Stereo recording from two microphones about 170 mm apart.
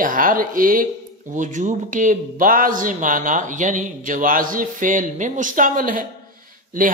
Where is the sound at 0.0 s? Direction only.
55° right (ahead or behind).